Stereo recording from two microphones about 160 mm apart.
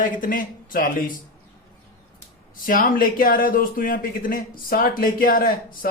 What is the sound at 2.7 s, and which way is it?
A man's voice, 60° left (ahead or behind).